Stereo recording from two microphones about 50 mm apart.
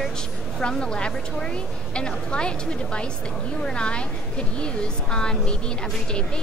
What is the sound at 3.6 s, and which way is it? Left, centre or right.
Speech, centre.